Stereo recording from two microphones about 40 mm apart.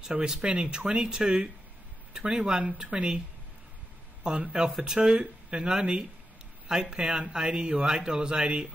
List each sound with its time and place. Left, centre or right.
0.0 s speech: centre
4.2 s speech: right